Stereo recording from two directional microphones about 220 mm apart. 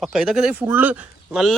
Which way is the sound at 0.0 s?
Centre (ahead or behind).